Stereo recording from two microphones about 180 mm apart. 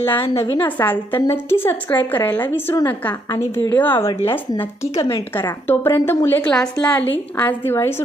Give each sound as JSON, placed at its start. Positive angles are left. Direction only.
{"t": 0.0, "sound": "a woman's voice", "side_deg": 10}
{"t": 0.3, "sound": "a woman's voice", "side_deg": 25}
{"t": 0.6, "sound": "a woman's voice", "side_deg": 10}
{"t": 3.8, "sound": "a woman's voice", "side_deg": 10}
{"t": 4.3, "sound": "a woman's voice", "side_deg": 25}